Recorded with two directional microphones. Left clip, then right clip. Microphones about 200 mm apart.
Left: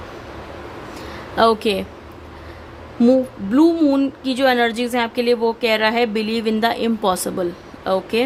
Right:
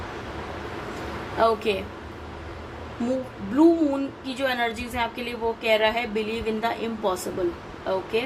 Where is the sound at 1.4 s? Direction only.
50° left (ahead or behind).